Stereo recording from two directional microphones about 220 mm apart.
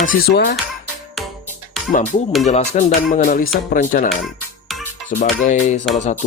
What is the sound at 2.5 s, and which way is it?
Music, 35° left (ahead or behind).